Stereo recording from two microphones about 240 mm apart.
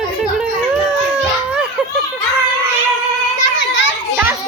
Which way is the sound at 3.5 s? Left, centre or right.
Left.